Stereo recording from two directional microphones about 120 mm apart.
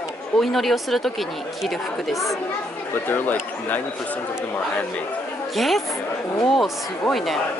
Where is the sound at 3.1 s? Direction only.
15° left (ahead or behind).